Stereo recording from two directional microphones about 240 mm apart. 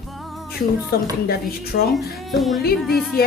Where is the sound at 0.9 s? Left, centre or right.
Left.